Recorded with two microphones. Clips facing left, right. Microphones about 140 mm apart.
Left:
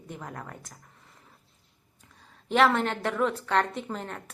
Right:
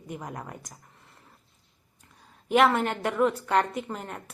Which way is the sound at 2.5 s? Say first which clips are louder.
Right 1 dB; 10° right (ahead or behind).